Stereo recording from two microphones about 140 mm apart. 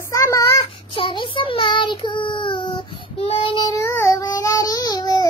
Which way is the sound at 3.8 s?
20° left (ahead or behind).